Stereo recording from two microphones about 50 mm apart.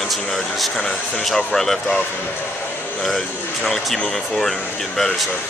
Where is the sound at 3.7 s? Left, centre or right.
Centre.